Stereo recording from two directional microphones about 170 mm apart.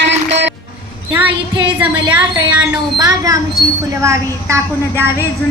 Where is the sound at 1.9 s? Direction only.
20° right (ahead or behind).